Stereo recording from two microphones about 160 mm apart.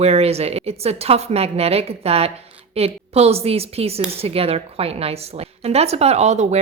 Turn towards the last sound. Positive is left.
turn(degrees=-45)  # may be behind; listen again after turning